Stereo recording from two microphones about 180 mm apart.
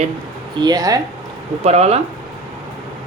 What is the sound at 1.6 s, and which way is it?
Speech, 35° right (ahead or behind).